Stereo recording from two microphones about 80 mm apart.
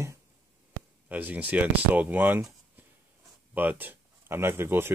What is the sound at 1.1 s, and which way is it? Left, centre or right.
Speech, centre.